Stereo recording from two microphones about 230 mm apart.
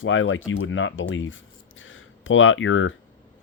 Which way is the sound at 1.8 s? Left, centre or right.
Left.